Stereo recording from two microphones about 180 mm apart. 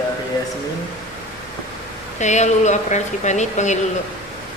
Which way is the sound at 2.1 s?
40° left (ahead or behind).